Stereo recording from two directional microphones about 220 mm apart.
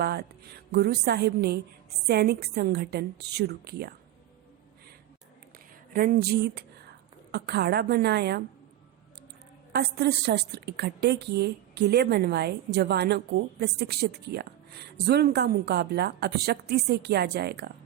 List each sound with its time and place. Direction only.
0.0 s a woman's voice: 45° right (ahead or behind)
5.9 s a woman's voice: 40° right (ahead or behind)
9.7 s a woman's voice: 50° right (ahead or behind)